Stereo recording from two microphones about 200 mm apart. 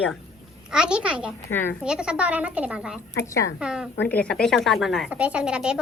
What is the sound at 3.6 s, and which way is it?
A child's voice, 5° right (ahead or behind).